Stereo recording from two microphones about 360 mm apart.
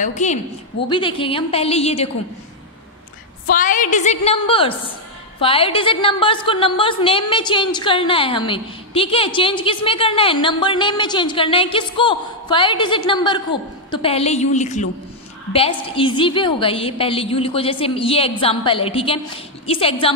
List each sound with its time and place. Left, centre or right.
0.0 s a woman's voice: centre
3.4 s a woman's voice: left